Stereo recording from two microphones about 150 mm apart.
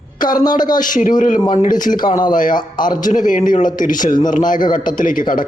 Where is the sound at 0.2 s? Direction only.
65° left (ahead or behind).